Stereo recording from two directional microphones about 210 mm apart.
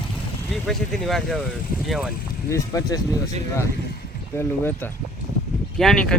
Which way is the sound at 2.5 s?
15° left (ahead or behind).